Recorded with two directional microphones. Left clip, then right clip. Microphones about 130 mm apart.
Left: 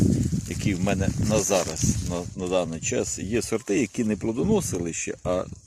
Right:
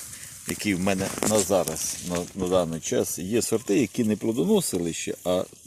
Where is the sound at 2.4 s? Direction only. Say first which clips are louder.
Right 1 dB; 30° left (ahead or behind).